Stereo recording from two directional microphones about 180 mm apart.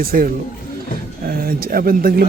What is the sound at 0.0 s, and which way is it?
Speech, 55° right (ahead or behind).